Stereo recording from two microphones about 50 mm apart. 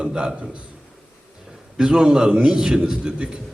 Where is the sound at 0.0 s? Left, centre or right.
Centre.